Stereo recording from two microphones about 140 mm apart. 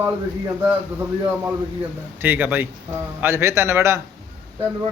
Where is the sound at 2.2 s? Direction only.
15° right (ahead or behind).